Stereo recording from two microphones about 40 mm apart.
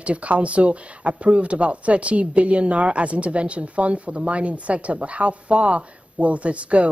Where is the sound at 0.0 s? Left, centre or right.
Right.